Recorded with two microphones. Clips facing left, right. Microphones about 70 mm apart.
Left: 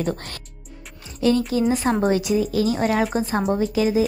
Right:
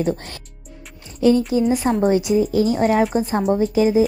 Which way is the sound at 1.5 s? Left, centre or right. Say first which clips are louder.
Right 2 dB; right.